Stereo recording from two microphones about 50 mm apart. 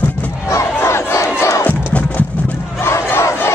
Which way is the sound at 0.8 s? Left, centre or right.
Left.